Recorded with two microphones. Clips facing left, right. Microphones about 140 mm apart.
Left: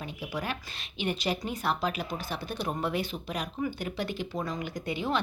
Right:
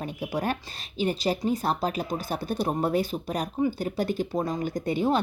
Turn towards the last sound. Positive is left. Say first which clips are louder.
# right 7 dB
turn(degrees=-45)  # may be behind; listen again after turning